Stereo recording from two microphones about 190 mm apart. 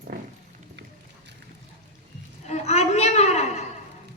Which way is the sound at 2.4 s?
35° left (ahead or behind).